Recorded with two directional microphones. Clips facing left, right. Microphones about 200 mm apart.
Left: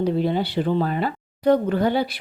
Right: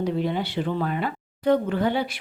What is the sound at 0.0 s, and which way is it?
Speech, 35° left (ahead or behind).